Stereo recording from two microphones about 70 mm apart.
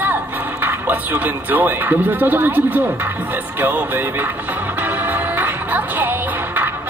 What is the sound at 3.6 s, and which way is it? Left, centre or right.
Music, right.